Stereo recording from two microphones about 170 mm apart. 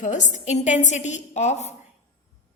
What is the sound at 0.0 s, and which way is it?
A woman's voice, 45° left (ahead or behind).